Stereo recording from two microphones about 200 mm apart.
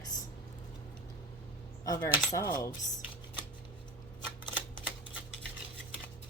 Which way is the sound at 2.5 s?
15° left (ahead or behind).